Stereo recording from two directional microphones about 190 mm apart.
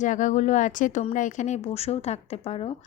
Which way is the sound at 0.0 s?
40° left (ahead or behind).